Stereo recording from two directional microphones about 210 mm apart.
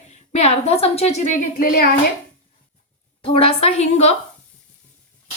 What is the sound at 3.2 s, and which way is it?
Speech, 25° left (ahead or behind).